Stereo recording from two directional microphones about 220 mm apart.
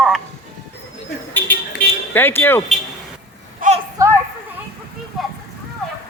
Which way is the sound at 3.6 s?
40° right (ahead or behind).